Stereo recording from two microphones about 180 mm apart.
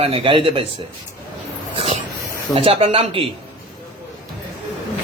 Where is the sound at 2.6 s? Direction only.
30° right (ahead or behind).